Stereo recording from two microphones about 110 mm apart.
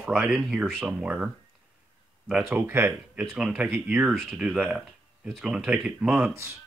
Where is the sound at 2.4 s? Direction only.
20° right (ahead or behind).